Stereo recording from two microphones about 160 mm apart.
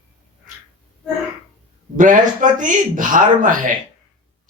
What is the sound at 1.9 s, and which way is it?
Speech, 55° right (ahead or behind).